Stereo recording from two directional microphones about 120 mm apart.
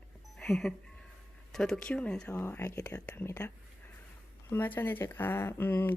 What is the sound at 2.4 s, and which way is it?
Speech, 20° left (ahead or behind).